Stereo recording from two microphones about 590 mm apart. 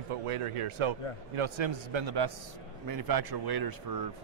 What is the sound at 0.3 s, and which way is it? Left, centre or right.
A man's voice, right.